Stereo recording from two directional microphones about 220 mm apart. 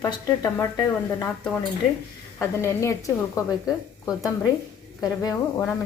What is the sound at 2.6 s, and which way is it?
Speech, 10° left (ahead or behind).